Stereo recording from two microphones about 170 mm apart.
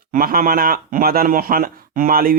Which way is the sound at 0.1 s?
55° right (ahead or behind).